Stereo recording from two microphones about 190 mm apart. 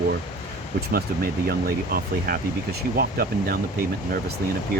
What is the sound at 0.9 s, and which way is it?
Speech, 55° right (ahead or behind).